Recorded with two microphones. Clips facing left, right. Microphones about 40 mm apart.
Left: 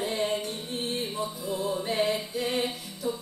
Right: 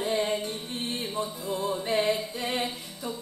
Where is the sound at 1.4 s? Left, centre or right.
Right.